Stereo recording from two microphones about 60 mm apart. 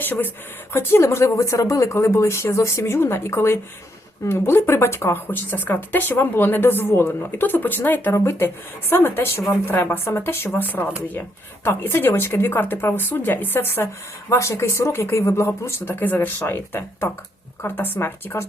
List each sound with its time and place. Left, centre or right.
0.0 s speech: left
0.7 s speech: left
8.1 s speech: left
11.6 s speech: left
14.3 s speech: left
15.9 s speech: left